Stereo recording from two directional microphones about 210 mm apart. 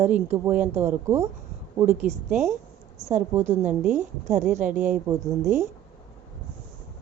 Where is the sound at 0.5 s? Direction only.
35° right (ahead or behind).